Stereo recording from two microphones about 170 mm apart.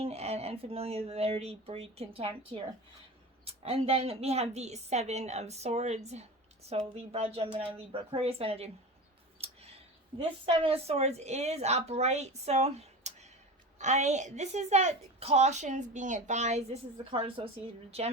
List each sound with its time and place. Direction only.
0.0 s a woman's voice: 40° right (ahead or behind)
9.4 s a sound: 35° right (ahead or behind)
10.2 s a woman's voice: 30° right (ahead or behind)